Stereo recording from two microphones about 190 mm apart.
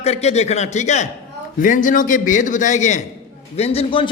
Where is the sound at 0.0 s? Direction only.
35° left (ahead or behind).